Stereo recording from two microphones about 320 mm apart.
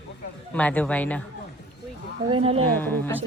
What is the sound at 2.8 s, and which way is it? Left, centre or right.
Speech, centre.